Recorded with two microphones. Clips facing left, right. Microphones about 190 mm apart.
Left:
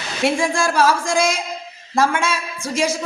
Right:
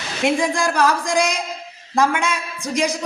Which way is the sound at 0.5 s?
15° right (ahead or behind).